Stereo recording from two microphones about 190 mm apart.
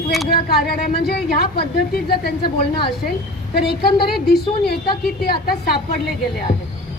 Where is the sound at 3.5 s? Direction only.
55° left (ahead or behind).